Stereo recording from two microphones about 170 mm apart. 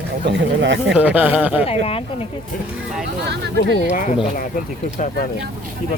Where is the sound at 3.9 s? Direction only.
50° left (ahead or behind).